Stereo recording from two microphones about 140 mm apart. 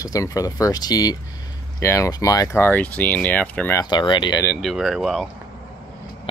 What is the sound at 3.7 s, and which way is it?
Speech, 30° left (ahead or behind).